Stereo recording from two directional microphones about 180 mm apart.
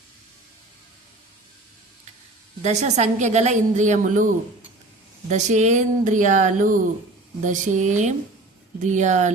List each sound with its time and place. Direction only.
2.6 s a woman's voice: 40° right (ahead or behind)
5.3 s speech: 40° right (ahead or behind)